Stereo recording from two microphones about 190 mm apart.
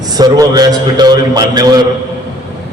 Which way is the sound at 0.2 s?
20° right (ahead or behind).